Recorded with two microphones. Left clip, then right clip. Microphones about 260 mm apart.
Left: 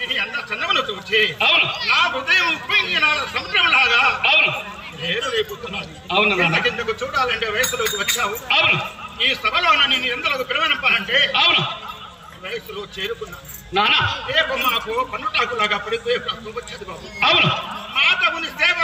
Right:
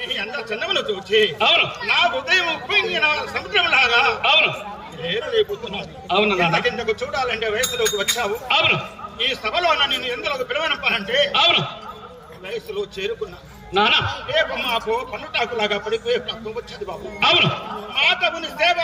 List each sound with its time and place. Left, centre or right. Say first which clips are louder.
0.0 s a man's voice: left 3 dB; centre